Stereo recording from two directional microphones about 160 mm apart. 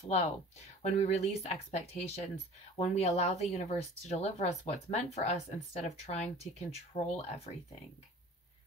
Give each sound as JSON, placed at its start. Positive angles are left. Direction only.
{"t": 0.0, "sound": "speech", "side_deg": 40}